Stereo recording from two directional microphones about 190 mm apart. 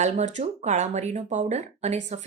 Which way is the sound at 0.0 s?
40° right (ahead or behind).